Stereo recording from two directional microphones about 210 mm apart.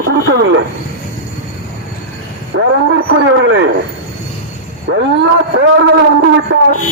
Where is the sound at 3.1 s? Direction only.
60° right (ahead or behind).